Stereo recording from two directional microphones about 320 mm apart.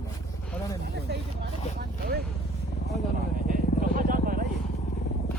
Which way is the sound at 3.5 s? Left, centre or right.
Right.